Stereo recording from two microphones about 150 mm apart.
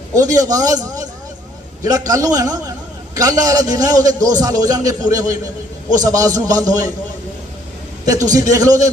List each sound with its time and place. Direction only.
0.1 s a man's voice: 25° right (ahead or behind)
8.3 s a man's voice: 25° right (ahead or behind)